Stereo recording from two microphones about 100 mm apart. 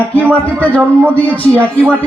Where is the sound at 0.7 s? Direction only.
15° left (ahead or behind).